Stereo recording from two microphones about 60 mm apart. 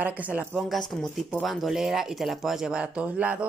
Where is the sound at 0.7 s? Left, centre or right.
Centre.